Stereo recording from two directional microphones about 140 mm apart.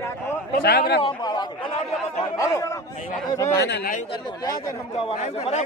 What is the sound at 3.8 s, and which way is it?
Speech, 65° left (ahead or behind).